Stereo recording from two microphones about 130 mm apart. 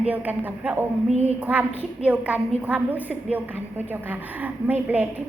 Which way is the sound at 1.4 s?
10° right (ahead or behind).